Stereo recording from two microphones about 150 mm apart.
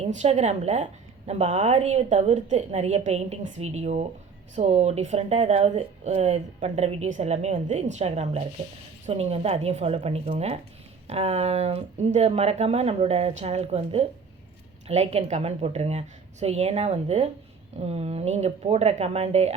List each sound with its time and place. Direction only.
0.0 s speech: 45° right (ahead or behind)